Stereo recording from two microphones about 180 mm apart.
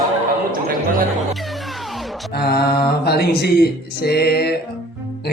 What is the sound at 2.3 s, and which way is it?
Mantra, 60° left (ahead or behind).